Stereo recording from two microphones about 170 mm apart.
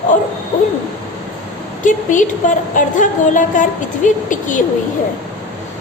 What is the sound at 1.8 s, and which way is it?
A woman's voice, 50° left (ahead or behind).